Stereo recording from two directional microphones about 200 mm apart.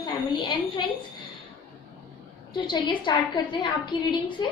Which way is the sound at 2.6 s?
25° left (ahead or behind).